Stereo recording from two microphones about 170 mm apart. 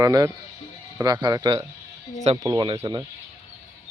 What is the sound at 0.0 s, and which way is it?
Speech, 20° right (ahead or behind).